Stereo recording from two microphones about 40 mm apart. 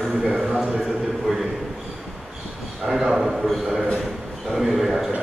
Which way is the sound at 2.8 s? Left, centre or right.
Centre.